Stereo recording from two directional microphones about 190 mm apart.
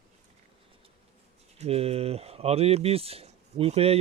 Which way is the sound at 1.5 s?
35° right (ahead or behind).